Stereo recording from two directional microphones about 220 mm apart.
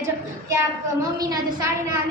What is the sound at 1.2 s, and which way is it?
Speech, 15° right (ahead or behind).